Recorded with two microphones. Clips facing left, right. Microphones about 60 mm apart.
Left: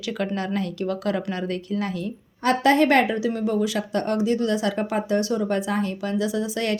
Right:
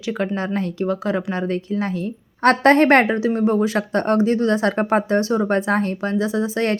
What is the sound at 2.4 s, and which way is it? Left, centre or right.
Speech, right.